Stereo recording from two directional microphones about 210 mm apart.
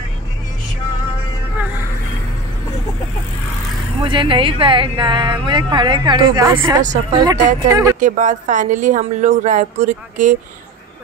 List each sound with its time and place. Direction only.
4.0 s speech: 25° right (ahead or behind)
8.0 s speech: 35° right (ahead or behind)